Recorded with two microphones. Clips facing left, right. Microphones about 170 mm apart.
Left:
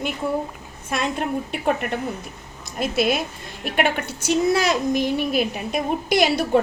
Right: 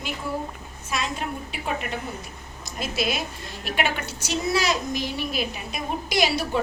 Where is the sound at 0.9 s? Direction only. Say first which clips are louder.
Left 5 dB; 55° left (ahead or behind).